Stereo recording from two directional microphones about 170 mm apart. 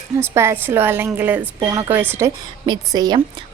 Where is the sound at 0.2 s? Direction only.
15° right (ahead or behind).